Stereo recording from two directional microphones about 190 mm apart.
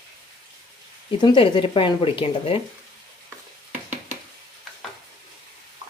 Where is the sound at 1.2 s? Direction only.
25° left (ahead or behind).